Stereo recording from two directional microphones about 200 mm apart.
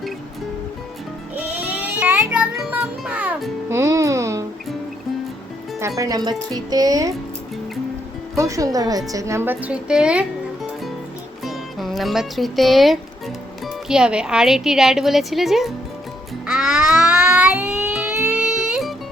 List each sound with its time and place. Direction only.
1.4 s music: 10° right (ahead or behind)
6.0 s speech: 20° right (ahead or behind)
8.4 s a woman's voice: 15° right (ahead or behind); by 15.7 s centre (ahead or behind)
16.5 s a sound: 5° right (ahead or behind)